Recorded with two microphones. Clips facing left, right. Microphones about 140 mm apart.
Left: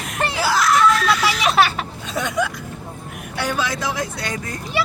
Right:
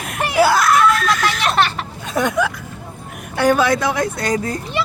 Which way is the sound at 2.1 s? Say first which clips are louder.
Right 5 dB; 55° right (ahead or behind).